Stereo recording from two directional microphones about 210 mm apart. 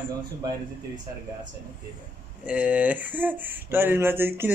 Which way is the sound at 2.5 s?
5° right (ahead or behind).